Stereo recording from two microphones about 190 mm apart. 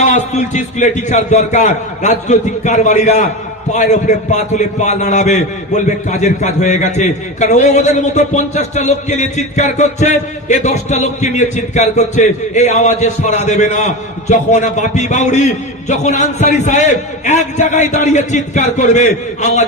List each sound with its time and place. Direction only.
0.0 s a man's voice: 40° left (ahead or behind)